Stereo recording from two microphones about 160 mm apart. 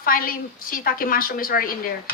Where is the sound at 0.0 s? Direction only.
60° left (ahead or behind).